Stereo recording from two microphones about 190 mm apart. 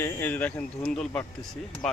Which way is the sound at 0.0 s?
10° left (ahead or behind).